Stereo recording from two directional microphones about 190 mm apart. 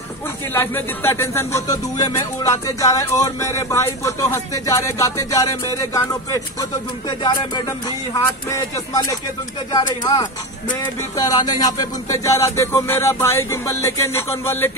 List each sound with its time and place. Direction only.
0.5 s speech: 10° left (ahead or behind)
11.4 s speech: 20° left (ahead or behind)